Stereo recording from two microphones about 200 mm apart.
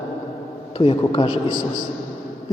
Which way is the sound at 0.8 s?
25° left (ahead or behind).